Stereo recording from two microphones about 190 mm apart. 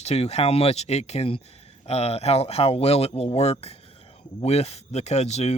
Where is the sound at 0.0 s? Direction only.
35° left (ahead or behind).